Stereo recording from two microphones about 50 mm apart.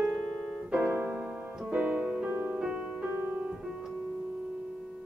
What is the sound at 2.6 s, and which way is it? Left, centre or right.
Music, centre.